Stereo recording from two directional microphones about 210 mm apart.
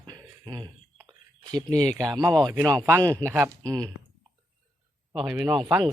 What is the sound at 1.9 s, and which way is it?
Speech, 15° right (ahead or behind).